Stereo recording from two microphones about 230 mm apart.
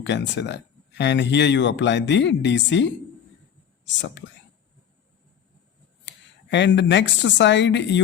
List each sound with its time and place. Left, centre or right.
0.0 s speech: left
6.1 s speech: left